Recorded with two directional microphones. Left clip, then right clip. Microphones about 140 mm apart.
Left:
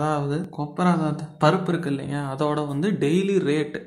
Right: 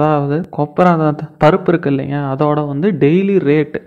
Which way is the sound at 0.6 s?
55° right (ahead or behind).